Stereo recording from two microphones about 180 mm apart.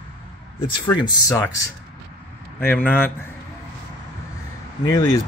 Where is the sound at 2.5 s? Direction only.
10° left (ahead or behind).